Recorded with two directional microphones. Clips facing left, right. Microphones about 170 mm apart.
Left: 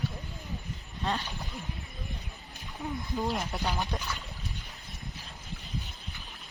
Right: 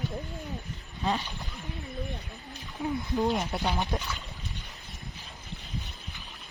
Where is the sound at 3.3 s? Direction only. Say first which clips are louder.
Right 3 dB; 5° right (ahead or behind).